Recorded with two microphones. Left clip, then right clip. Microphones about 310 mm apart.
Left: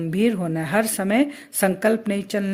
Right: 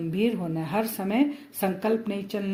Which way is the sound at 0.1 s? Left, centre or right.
Left.